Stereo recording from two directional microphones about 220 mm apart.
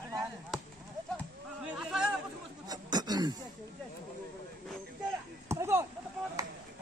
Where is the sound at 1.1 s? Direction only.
Centre (ahead or behind).